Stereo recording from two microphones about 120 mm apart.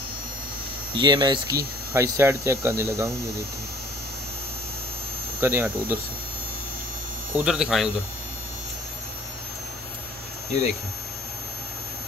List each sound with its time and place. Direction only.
0.9 s hum: 40° right (ahead or behind); by 3.1 s 20° right (ahead or behind)
5.4 s hum: 20° right (ahead or behind)
7.3 s speech: 5° right (ahead or behind)